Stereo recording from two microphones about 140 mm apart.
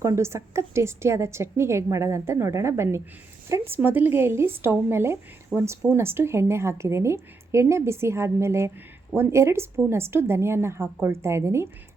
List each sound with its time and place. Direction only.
0.0 s a woman's voice: 20° right (ahead or behind)